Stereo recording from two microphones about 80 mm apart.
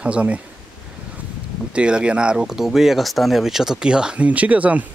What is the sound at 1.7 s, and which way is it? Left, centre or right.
Speech, centre.